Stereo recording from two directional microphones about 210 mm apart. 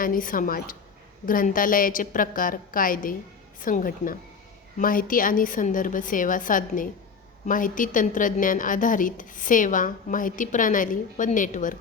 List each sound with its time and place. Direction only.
0.0 s a woman's voice: 40° left (ahead or behind)